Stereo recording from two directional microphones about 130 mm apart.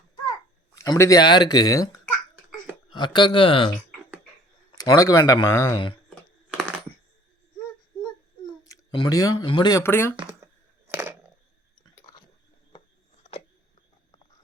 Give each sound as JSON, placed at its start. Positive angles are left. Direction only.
{"t": 0.8, "sound": "speech", "side_deg": 25}
{"t": 2.9, "sound": "speech", "side_deg": 35}
{"t": 4.9, "sound": "speech", "side_deg": 30}
{"t": 6.5, "sound": "computer keyboard", "side_deg": 0}
{"t": 8.6, "sound": "speech", "side_deg": 30}
{"t": 9.8, "sound": "speech", "side_deg": 15}
{"t": 10.8, "sound": "a sound", "side_deg": -15}